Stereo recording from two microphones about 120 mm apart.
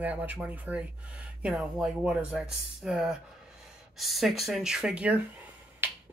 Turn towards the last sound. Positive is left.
turn(degrees=-15)  # may be behind; listen again after turning